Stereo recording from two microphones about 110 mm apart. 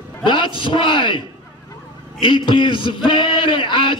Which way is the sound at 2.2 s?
45° left (ahead or behind).